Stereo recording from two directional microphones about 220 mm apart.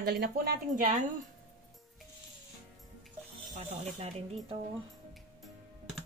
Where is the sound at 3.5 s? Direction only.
30° right (ahead or behind).